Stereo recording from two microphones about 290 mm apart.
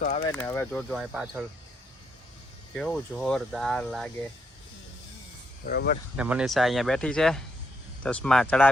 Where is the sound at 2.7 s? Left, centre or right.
Centre.